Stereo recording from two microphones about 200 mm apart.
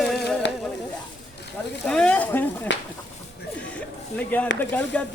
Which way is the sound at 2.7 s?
65° left (ahead or behind).